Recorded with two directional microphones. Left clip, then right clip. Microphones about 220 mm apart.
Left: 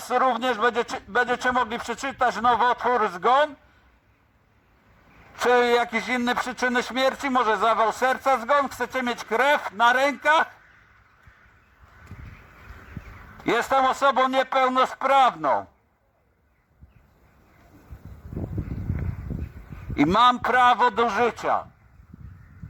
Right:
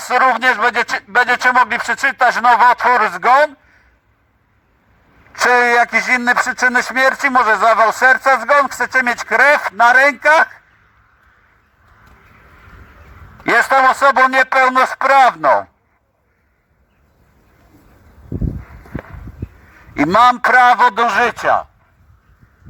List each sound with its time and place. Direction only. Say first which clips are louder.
0.0 s speech: right 10 dB; 30° right (ahead or behind)
5.4 s speech: right 8 dB; 35° right (ahead or behind)
13.4 s speech: right 10 dB; 35° right (ahead or behind)
20.1 s speech: right 9 dB; 40° right (ahead or behind)